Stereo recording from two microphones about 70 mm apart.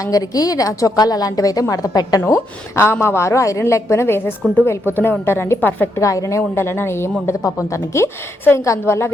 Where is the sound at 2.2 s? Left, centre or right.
Left.